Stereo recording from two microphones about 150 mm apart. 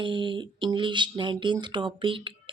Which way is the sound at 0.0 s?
30° right (ahead or behind).